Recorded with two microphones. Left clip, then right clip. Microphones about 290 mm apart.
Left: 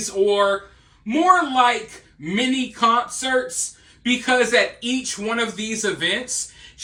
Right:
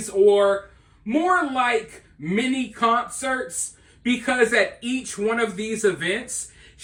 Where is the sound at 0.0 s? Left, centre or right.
Centre.